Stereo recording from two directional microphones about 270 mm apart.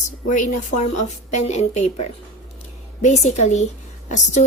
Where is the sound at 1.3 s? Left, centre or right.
Left.